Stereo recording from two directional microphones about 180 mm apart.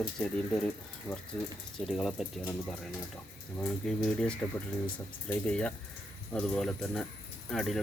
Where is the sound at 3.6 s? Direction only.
5° left (ahead or behind).